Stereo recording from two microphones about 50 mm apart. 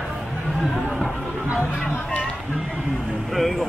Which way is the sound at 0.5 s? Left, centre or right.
Centre.